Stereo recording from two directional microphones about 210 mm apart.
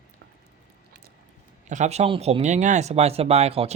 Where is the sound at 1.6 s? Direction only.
35° right (ahead or behind).